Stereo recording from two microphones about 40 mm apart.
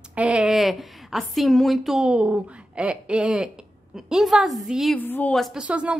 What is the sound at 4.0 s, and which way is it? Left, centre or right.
Speech, centre.